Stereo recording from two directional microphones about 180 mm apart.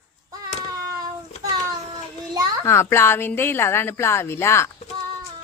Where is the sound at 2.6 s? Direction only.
15° left (ahead or behind).